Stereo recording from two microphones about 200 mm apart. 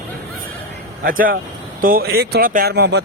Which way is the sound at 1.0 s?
45° right (ahead or behind).